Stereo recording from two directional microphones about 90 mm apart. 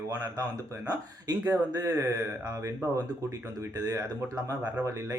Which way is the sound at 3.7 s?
45° right (ahead or behind).